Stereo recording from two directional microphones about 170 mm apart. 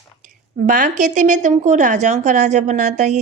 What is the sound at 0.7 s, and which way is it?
A woman's voice, 50° right (ahead or behind).